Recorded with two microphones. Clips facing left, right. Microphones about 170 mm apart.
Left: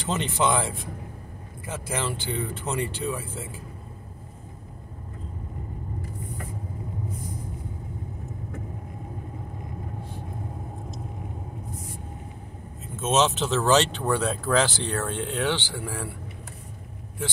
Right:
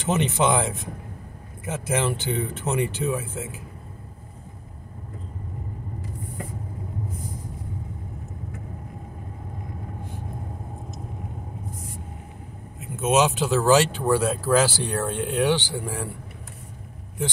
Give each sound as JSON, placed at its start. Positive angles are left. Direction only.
{"t": 0.0, "sound": "speech", "side_deg": -20}
{"t": 12.8, "sound": "speech", "side_deg": -15}